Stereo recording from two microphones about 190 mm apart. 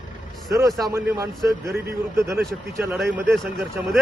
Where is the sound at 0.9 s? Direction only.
15° right (ahead or behind); by 4.0 s centre (ahead or behind).